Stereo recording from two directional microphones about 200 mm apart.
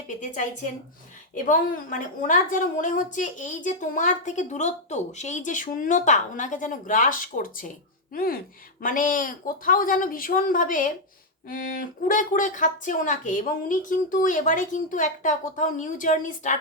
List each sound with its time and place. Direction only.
1.5 s a woman's voice: 40° left (ahead or behind)